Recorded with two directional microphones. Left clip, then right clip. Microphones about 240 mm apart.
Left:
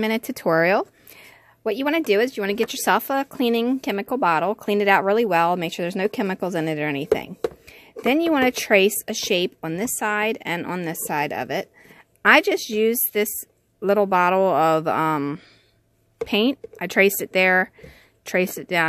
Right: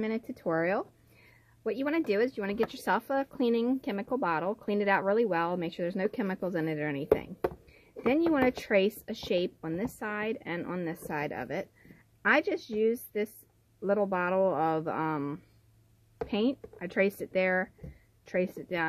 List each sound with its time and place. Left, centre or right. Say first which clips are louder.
0.0 s speech: left 11 dB; left